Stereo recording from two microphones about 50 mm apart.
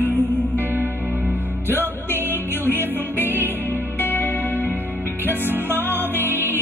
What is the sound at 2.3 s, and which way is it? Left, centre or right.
Music, left.